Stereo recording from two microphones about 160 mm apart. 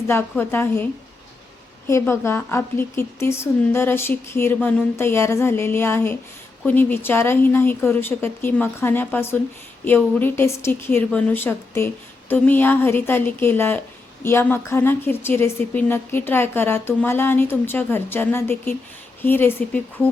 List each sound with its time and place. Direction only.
0.1 s a woman's voice: 15° left (ahead or behind)
1.9 s a woman's voice: 15° left (ahead or behind)